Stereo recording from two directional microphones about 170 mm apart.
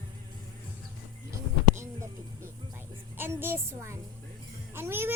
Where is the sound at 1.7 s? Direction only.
15° right (ahead or behind).